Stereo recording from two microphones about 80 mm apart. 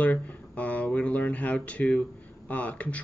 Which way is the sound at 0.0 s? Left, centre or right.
Centre.